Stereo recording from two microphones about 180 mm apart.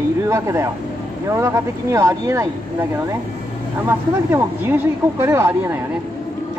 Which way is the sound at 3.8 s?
10° right (ahead or behind).